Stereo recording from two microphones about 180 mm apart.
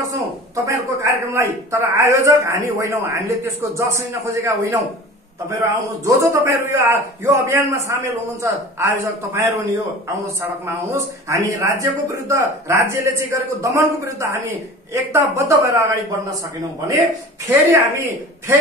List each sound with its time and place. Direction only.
0.7 s a man's voice: 15° right (ahead or behind)
17.5 s a man's voice: 15° right (ahead or behind)